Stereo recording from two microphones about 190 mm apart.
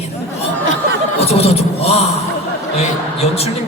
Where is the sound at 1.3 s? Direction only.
30° left (ahead or behind).